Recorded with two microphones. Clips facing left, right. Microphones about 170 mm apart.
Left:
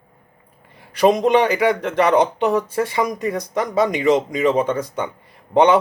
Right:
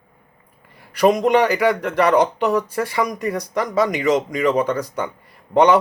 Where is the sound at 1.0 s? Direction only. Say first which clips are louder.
Even; 25° left (ahead or behind).